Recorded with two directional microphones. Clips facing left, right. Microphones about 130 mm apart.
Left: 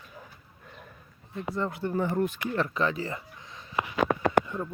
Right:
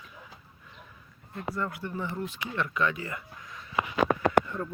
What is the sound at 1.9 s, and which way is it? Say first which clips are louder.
Speech: left 7 dB; 45° left (ahead or behind).